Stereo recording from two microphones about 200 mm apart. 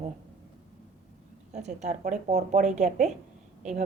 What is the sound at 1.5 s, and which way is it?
Speech, 35° right (ahead or behind).